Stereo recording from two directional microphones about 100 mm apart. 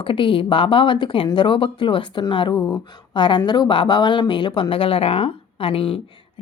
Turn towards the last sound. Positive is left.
turn(degrees=65)  # may be behind; listen again after turning